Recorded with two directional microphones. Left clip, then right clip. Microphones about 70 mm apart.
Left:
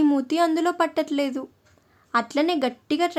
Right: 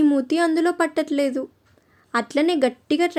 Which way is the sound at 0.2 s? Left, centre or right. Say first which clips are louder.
Right 2 dB; right.